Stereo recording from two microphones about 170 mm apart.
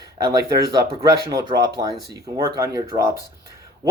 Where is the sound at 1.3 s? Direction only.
20° right (ahead or behind).